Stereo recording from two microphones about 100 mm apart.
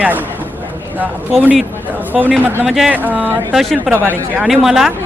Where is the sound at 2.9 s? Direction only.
15° right (ahead or behind).